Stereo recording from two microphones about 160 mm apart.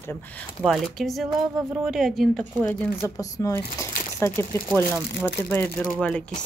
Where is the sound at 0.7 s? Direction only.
Centre (ahead or behind).